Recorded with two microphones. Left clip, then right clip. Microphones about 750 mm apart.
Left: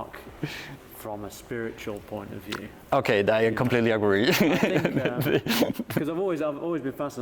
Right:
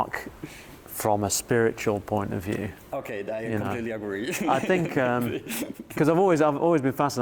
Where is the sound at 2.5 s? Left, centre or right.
Left.